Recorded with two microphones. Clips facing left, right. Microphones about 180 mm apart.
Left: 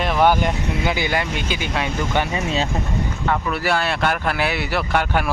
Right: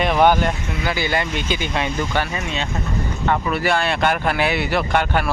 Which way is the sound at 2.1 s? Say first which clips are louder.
Left 4 dB; 20° left (ahead or behind).